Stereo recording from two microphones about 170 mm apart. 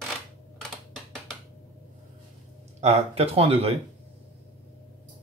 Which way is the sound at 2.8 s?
40° right (ahead or behind).